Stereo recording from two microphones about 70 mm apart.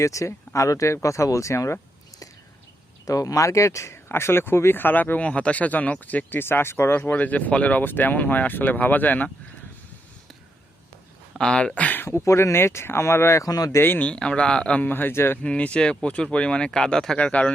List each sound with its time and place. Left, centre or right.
0.0 s speech: left
11.3 s speech: centre
11.9 s speech: left
13.7 s speech: left
14.1 s speech: centre
14.8 s speech: left
15.4 s speech: centre